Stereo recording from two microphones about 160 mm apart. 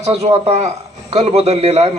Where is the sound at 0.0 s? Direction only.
40° right (ahead or behind).